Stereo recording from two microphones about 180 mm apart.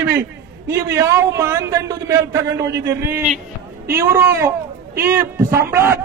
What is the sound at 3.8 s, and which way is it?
A man's voice, 15° right (ahead or behind).